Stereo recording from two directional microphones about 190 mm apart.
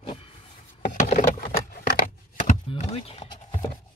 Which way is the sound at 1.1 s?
50° left (ahead or behind).